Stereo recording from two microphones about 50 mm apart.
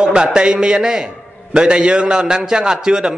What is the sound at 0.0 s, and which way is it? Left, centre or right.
A man's voice, centre.